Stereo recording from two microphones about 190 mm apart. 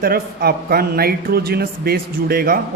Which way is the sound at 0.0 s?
50° right (ahead or behind).